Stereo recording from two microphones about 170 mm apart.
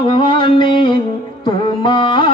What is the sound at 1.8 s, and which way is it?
Carnatic music, 30° left (ahead or behind).